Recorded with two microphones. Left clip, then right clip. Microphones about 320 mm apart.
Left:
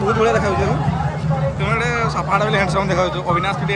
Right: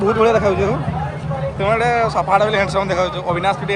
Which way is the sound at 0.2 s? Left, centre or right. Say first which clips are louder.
Right 4 dB; centre.